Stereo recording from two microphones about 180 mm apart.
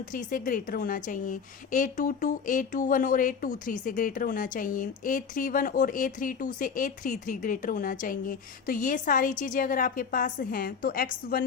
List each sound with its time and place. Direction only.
0.0 s a woman's voice: 45° left (ahead or behind)